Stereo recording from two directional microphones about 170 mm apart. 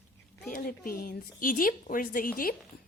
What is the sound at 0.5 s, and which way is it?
Speech, 60° left (ahead or behind).